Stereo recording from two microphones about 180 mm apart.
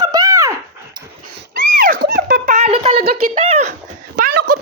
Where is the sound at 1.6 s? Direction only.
50° right (ahead or behind).